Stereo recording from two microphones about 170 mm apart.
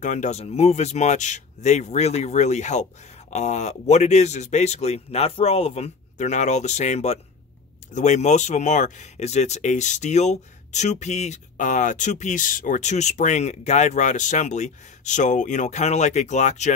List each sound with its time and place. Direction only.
0.0 s speech: 45° left (ahead or behind)